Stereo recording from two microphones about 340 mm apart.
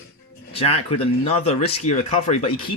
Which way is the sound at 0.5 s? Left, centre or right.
Centre.